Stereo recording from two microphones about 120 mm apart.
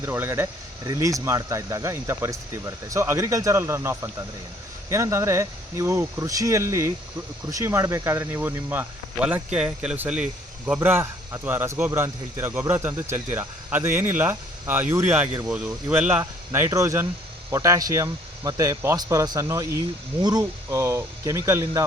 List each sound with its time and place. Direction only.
0.0 s speech: 20° right (ahead or behind)
10.8 s speech: 20° right (ahead or behind)